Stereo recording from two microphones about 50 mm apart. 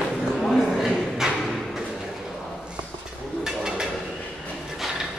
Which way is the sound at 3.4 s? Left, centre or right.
Centre.